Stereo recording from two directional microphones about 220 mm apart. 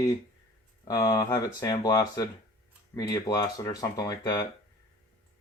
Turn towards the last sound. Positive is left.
turn(degrees=15)  # may be behind; listen again after turning